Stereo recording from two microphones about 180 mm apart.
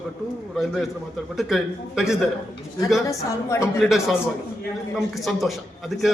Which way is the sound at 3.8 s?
Centre (ahead or behind).